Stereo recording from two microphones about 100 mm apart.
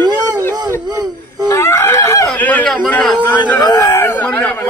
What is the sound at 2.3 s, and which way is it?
Speech, 15° left (ahead or behind).